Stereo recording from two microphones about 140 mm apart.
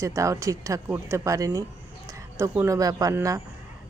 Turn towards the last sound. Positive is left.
turn(degrees=-25)  # may be behind; listen again after turning